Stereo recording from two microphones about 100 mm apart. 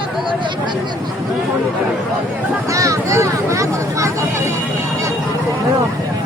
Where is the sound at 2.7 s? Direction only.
35° right (ahead or behind).